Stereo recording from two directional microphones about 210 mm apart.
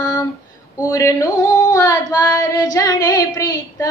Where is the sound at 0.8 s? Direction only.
15° left (ahead or behind).